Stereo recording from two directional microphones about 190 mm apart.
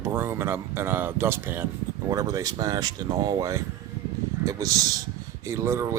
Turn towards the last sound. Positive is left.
turn(degrees=-15)  # may be behind; listen again after turning